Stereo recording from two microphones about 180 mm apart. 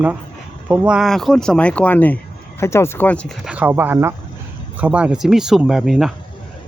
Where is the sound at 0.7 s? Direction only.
5° right (ahead or behind).